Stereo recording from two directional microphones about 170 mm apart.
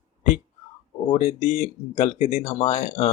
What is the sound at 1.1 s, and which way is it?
Speech, 40° left (ahead or behind).